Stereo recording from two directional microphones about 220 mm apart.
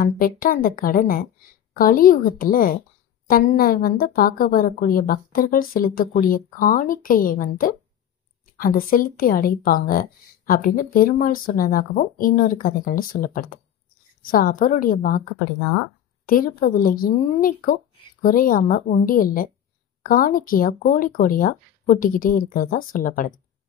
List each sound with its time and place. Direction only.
0.0 s a woman's voice: 40° left (ahead or behind)